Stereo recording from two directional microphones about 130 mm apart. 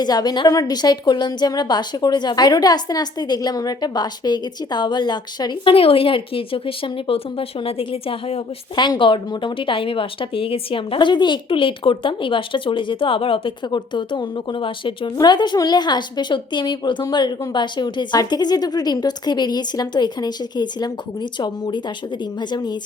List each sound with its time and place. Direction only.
0.0 s a woman's voice: 30° left (ahead or behind); by 8.4 s 50° left (ahead or behind)
8.7 s a woman's voice: 35° left (ahead or behind)